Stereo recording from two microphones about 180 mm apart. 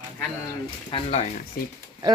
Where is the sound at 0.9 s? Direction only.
35° left (ahead or behind).